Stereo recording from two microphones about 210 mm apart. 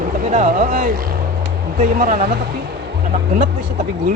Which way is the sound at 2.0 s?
35° right (ahead or behind).